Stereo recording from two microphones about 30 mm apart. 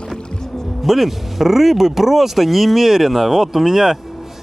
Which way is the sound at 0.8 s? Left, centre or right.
Centre.